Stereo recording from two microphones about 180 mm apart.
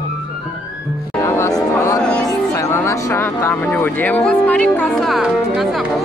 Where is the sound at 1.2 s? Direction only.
15° left (ahead or behind).